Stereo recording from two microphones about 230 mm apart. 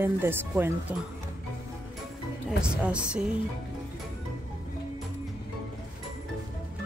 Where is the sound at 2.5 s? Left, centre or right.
Centre.